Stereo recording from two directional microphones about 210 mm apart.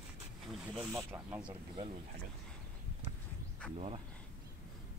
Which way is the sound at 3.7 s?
25° right (ahead or behind).